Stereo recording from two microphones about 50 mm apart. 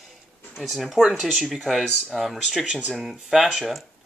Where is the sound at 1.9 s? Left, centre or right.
Centre.